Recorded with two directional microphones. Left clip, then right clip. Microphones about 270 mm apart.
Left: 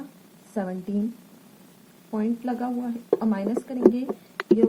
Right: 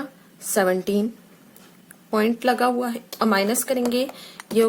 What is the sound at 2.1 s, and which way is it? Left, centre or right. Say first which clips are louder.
A woman's voice: right 9 dB; centre.